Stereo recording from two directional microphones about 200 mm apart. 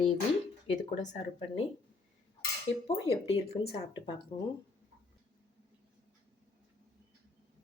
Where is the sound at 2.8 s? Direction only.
30° left (ahead or behind).